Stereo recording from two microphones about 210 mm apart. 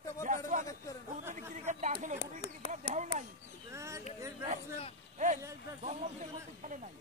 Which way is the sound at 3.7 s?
15° right (ahead or behind).